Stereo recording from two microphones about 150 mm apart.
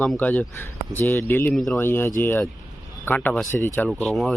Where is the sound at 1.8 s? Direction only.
15° left (ahead or behind).